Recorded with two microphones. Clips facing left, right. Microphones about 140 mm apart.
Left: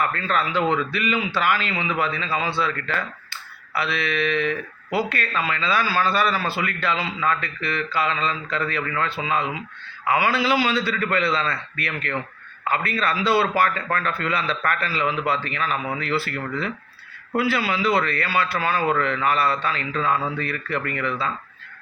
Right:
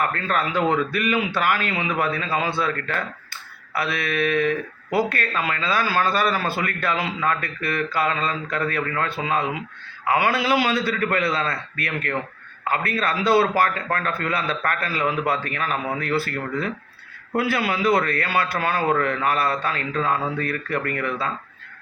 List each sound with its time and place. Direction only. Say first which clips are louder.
0.0 s a man's voice: even; 50° right (ahead or behind)